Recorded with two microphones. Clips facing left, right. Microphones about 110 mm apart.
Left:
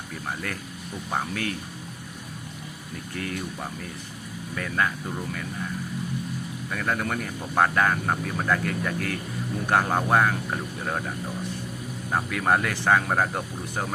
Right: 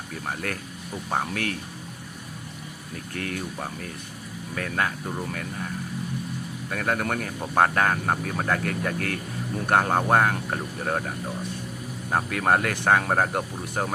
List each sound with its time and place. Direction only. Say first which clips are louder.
1.3 s speech: right 1 dB; 55° right (ahead or behind)
3.2 s speech: even; 55° right (ahead or behind)
4.5 s speech: even; 50° right (ahead or behind)
6.7 s speech: right 2 dB; 45° right (ahead or behind)
12.1 s speech: right 1 dB; 50° right (ahead or behind)
13.1 s speech: right 1 dB; 40° right (ahead or behind)